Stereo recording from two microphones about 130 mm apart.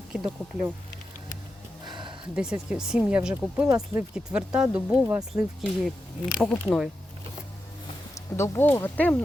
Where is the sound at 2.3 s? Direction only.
5° right (ahead or behind).